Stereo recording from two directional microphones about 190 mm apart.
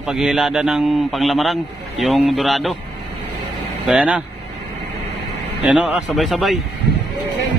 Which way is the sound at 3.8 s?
5° right (ahead or behind).